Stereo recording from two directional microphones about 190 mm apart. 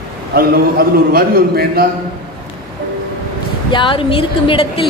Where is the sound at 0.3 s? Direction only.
55° right (ahead or behind).